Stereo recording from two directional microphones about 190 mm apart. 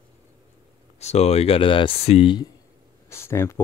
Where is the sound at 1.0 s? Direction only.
35° left (ahead or behind).